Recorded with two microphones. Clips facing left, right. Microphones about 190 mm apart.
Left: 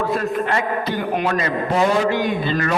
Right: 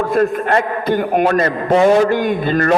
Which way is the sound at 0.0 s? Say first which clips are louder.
Right 5 dB; 50° right (ahead or behind).